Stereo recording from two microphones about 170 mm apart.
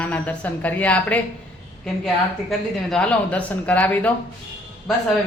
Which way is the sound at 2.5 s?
5° left (ahead or behind).